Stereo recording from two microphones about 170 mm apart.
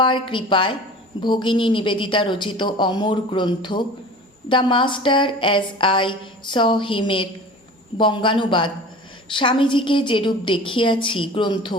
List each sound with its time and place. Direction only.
0.0 s speech: 30° left (ahead or behind)